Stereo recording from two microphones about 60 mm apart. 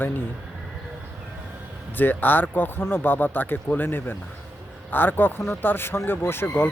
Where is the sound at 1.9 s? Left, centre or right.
Left.